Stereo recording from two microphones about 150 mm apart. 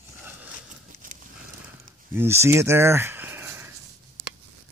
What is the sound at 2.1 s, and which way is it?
Speech, 15° right (ahead or behind).